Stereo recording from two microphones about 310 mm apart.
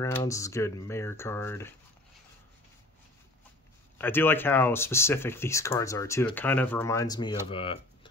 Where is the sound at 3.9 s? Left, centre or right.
Centre.